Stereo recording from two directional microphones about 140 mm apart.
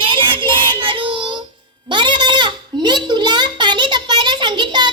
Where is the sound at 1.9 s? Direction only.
35° right (ahead or behind).